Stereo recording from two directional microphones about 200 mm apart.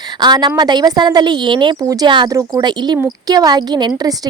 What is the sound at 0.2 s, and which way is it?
A woman's voice, 20° right (ahead or behind).